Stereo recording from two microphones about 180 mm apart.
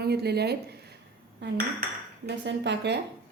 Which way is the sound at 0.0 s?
65° right (ahead or behind).